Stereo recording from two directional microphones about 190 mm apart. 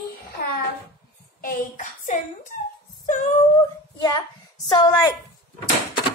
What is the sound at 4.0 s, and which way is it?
A woman's voice, 25° left (ahead or behind).